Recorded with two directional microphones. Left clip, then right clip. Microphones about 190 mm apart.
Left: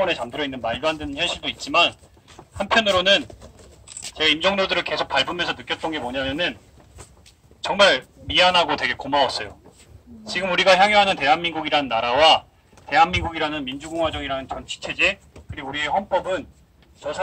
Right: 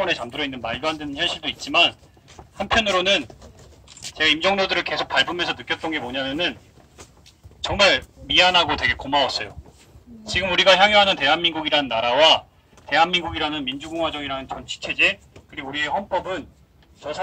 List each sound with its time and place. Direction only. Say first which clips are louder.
0.0 s a man's voice: left 1 dB; 20° left (ahead or behind)
7.6 s a man's voice: left 1 dB; 15° left (ahead or behind)